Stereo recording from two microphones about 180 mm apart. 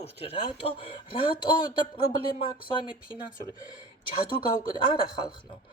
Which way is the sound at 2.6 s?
25° left (ahead or behind).